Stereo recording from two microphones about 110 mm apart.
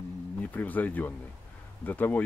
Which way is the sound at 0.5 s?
15° left (ahead or behind).